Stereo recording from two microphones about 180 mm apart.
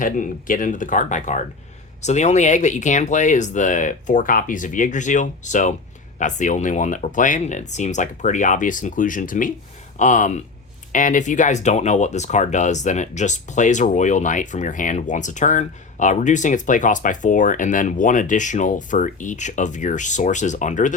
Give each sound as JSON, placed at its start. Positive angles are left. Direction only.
{"t": 0.0, "sound": "speech", "side_deg": 50}